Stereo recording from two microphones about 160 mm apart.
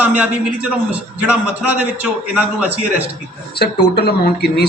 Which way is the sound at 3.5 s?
90° left.